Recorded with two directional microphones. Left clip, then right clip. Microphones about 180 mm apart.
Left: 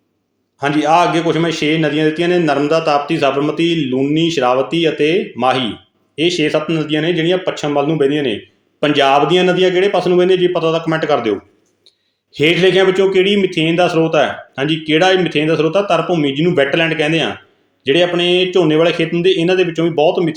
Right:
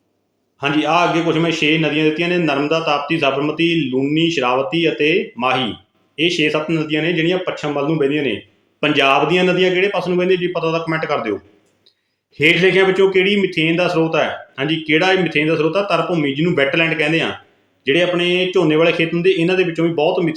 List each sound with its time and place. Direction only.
0.8 s a man's voice: 25° left (ahead or behind)
12.4 s a man's voice: 25° left (ahead or behind)